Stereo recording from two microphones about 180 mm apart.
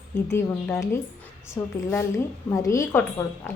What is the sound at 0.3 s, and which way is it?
A woman's voice, 15° left (ahead or behind).